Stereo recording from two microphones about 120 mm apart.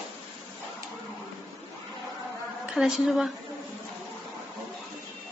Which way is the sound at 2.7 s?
5° right (ahead or behind).